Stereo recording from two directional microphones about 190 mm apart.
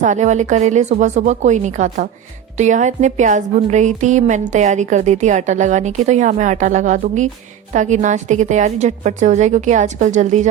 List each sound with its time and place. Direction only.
0.0 s a woman's voice: 40° right (ahead or behind)